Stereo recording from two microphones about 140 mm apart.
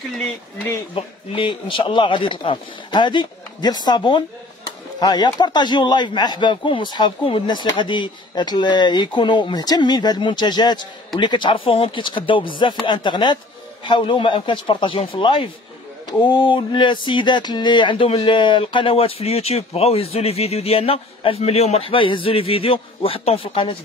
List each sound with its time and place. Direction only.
0.2 s speech: 10° left (ahead or behind)
0.9 s speech: 40° left (ahead or behind)